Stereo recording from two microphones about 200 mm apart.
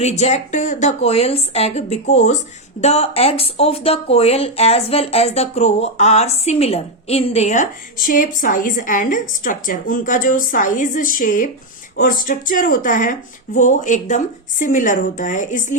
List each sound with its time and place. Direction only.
0.0 s speech: 35° left (ahead or behind)